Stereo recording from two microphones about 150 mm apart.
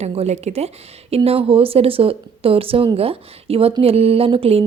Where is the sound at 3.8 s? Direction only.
40° right (ahead or behind).